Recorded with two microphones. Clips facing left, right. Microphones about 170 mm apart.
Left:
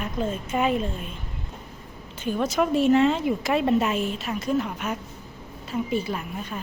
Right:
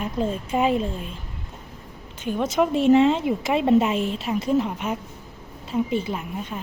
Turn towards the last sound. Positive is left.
turn(degrees=-15)  # may be behind; listen again after turning